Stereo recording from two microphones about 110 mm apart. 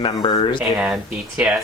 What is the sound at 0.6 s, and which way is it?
Speech, 20° right (ahead or behind).